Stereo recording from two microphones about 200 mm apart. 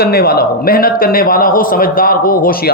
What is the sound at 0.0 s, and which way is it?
Speech, 50° left (ahead or behind).